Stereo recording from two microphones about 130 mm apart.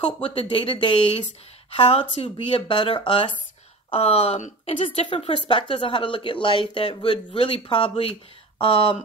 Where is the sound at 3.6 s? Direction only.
50° left (ahead or behind).